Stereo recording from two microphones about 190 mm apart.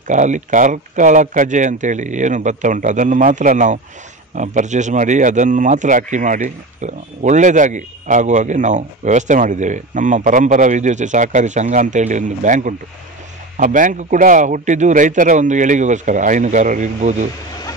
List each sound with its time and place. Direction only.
0.1 s speech: 40° right (ahead or behind)